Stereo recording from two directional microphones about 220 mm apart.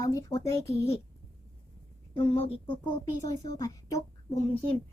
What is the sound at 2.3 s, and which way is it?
A woman's voice, 25° left (ahead or behind).